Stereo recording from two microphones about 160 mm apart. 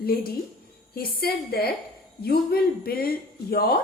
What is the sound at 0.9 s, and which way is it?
A woman's voice, 70° left (ahead or behind).